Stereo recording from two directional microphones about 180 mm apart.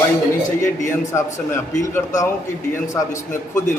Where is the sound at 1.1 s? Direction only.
15° left (ahead or behind).